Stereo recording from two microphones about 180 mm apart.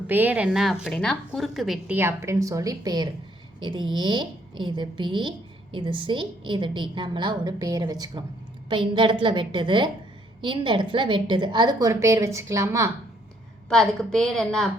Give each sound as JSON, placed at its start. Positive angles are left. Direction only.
{"t": 0.1, "sound": "a woman's voice", "side_deg": -10}
{"t": 13.7, "sound": "a woman's voice", "side_deg": 5}